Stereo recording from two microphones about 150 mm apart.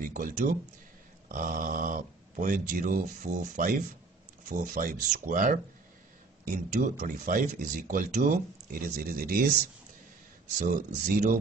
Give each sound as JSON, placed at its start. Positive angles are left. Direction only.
{"t": 0.0, "sound": "speech", "side_deg": -65}
{"t": 10.6, "sound": "speech", "side_deg": -60}